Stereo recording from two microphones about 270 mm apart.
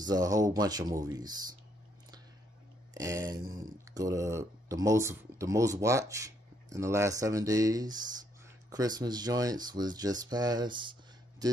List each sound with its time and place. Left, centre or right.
0.0 s speech: centre
2.9 s a sound: centre
3.9 s speech: centre